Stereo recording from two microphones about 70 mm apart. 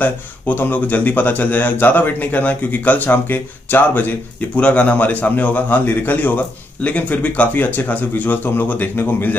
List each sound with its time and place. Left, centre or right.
0.0 s speech: left